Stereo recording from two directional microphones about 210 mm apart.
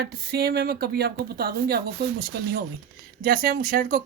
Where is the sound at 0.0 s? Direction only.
50° right (ahead or behind).